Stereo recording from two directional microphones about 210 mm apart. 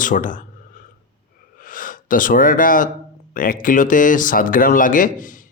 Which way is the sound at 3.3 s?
40° left (ahead or behind).